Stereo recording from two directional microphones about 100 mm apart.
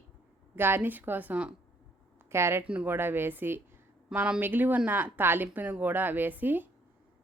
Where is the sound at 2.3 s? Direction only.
25° right (ahead or behind).